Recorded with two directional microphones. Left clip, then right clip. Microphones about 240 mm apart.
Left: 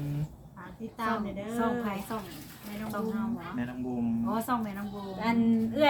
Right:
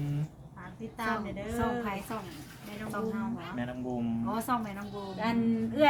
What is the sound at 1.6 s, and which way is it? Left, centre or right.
Speech, centre.